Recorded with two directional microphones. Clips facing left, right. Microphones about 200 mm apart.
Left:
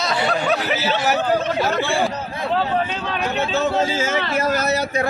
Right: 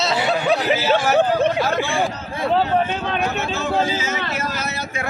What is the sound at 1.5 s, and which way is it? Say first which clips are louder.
Speech: left 1 dB; 15° right (ahead or behind).